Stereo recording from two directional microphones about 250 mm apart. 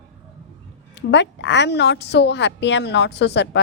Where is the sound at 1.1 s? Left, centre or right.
Left.